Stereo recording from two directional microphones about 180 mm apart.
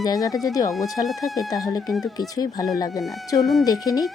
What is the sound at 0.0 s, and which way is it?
Speech, 20° left (ahead or behind).